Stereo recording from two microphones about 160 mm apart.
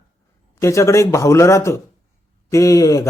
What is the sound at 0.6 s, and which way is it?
A man's voice, 20° left (ahead or behind).